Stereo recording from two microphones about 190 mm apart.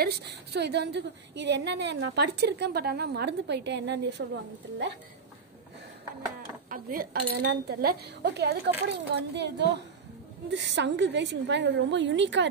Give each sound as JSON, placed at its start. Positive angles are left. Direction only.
{"t": 0.0, "sound": "a woman's voice", "side_deg": -60}
{"t": 6.7, "sound": "a woman's voice", "side_deg": -50}